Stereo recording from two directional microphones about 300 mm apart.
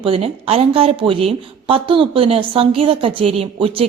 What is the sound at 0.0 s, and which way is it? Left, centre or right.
Speech, centre.